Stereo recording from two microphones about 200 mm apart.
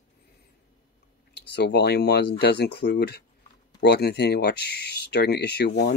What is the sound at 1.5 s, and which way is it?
Speech, 60° left (ahead or behind).